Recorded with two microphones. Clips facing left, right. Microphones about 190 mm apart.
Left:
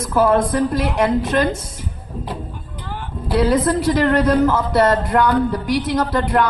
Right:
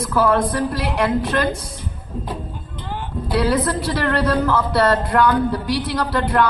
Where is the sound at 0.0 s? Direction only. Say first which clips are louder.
Left 2 dB; 20° left (ahead or behind).